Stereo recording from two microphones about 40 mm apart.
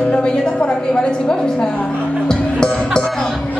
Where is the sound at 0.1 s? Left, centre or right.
Left.